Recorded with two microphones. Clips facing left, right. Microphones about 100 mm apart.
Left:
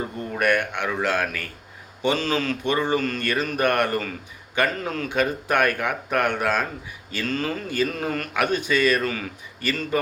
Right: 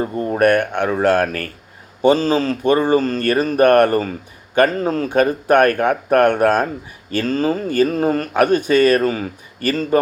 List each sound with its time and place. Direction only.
0.0 s speech: 45° right (ahead or behind)